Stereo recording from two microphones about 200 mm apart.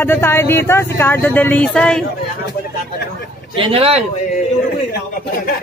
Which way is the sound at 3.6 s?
30° right (ahead or behind).